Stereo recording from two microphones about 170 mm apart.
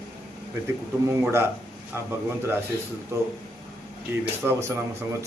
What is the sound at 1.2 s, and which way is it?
A man's voice, 15° right (ahead or behind).